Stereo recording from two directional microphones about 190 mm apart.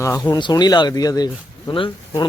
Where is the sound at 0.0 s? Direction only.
20° left (ahead or behind).